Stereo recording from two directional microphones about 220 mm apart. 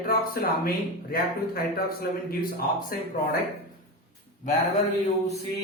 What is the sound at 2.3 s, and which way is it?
Music, 40° left (ahead or behind).